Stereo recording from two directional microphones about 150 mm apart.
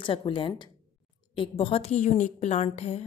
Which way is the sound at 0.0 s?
35° left (ahead or behind).